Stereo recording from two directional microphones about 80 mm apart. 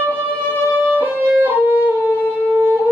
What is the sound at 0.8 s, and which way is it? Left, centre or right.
Violin, right.